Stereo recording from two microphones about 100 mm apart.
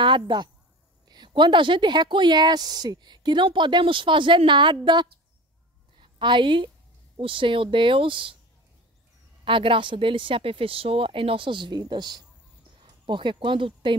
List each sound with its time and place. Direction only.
0.0 s a woman's voice: 50° right (ahead or behind)
9.4 s speech: 60° right (ahead or behind)